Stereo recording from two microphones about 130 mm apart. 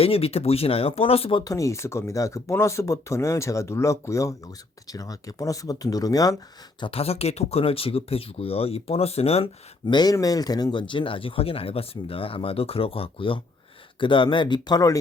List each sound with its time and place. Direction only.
0.0 s speech: 50° left (ahead or behind)
1.5 s speech: 25° left (ahead or behind)
6.7 s speech: 45° left (ahead or behind)
9.8 s speech: 35° left (ahead or behind)